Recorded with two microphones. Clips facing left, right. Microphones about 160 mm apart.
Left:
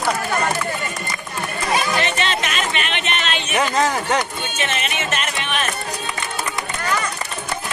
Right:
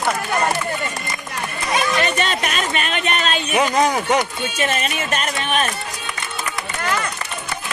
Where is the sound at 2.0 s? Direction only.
40° right (ahead or behind).